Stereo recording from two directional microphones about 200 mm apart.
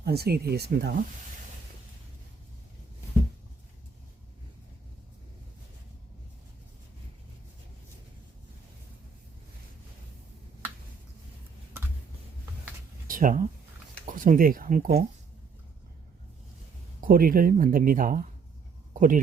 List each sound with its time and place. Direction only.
0.0 s speech: 50° right (ahead or behind)
13.1 s a sound: 40° right (ahead or behind)
14.0 s speech: 40° right (ahead or behind)
17.0 s speech: 45° right (ahead or behind)